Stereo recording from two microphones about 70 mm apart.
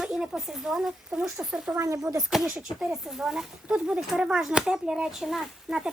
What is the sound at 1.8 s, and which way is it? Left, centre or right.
Speech, right.